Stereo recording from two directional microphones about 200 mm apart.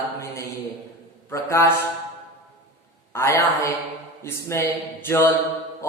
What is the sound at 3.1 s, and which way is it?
A man's voice, 15° left (ahead or behind).